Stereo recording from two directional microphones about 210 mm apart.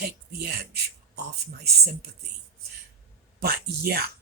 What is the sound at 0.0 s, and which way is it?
Speech, 50° right (ahead or behind).